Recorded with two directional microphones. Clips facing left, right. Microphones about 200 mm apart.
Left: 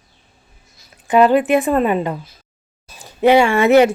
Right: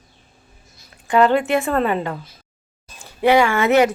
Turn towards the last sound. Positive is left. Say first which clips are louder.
# left 4 dB
turn(degrees=25)  # may be behind; listen again after turning